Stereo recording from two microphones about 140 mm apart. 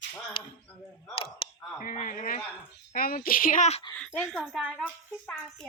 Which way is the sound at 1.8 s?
65° left (ahead or behind).